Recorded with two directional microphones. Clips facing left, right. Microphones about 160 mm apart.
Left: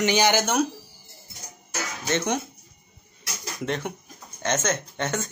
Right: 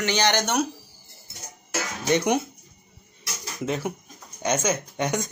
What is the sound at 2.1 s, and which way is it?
Speech, 15° right (ahead or behind).